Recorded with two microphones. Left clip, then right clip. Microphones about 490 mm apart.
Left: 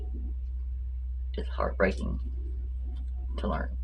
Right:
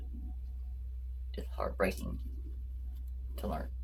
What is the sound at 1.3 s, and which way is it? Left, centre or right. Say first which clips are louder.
Speech: left 6 dB; right.